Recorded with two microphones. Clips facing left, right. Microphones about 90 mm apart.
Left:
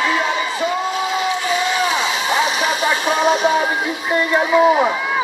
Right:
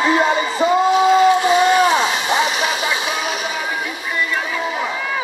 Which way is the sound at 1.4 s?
45° right (ahead or behind).